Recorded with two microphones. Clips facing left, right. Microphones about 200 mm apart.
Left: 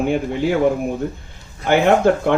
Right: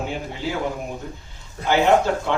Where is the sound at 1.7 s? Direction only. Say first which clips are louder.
Left 4 dB; 55° left (ahead or behind).